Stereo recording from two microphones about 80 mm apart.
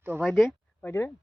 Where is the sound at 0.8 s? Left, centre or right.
Left.